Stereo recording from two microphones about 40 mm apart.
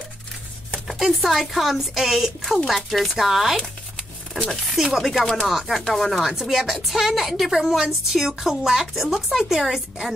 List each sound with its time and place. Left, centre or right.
1.2 s a woman's voice: centre
4.8 s a woman's voice: centre
5.5 s speech: centre
5.9 s a woman's voice: centre
6.2 s a woman's voice: centre